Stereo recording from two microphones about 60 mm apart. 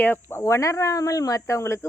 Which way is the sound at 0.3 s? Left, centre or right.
Left.